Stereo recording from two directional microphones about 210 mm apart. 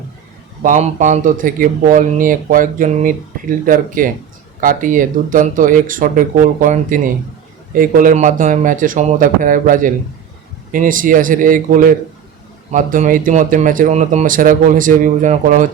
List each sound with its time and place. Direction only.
0.6 s speech: 35° right (ahead or behind)